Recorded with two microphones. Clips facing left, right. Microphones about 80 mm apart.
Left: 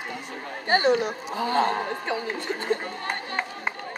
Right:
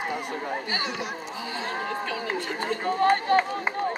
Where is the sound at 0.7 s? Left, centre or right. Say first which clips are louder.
Left 9 dB; left.